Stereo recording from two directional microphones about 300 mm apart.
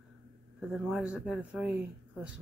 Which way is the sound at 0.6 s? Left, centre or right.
Centre.